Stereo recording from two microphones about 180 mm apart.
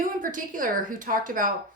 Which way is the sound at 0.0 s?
50° right (ahead or behind).